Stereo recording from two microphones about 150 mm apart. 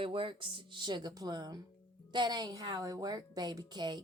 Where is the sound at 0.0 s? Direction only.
35° right (ahead or behind).